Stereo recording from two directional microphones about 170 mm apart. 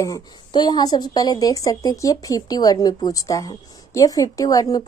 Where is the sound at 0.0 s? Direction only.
25° left (ahead or behind).